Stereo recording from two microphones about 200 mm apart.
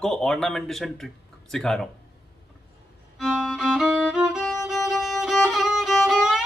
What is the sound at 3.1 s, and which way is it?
Music, centre (ahead or behind).